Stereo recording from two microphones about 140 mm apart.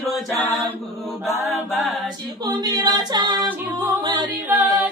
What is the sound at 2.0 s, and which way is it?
A capella, 30° right (ahead or behind).